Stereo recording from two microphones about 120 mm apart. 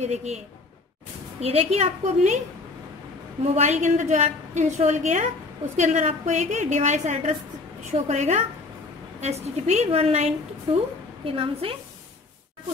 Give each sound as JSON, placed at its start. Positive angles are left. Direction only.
{"t": 0.0, "sound": "a woman's voice", "side_deg": -65}
{"t": 1.4, "sound": "a woman's voice", "side_deg": -55}
{"t": 3.4, "sound": "a woman's voice", "side_deg": -70}
{"t": 5.8, "sound": "a woman's voice", "side_deg": -75}